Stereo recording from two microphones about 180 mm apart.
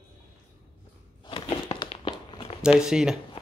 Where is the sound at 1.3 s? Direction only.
30° left (ahead or behind).